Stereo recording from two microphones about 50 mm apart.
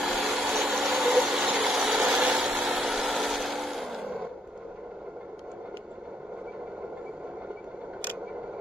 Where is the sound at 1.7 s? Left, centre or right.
Right.